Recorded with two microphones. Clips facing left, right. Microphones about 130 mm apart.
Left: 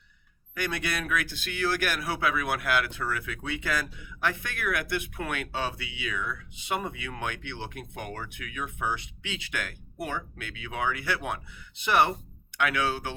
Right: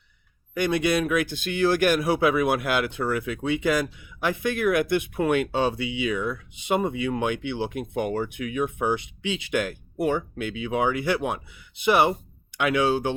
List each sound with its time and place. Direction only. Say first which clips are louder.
0.5 s speech: right 9 dB; 20° right (ahead or behind)